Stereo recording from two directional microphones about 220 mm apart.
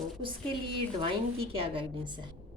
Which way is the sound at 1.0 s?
25° right (ahead or behind).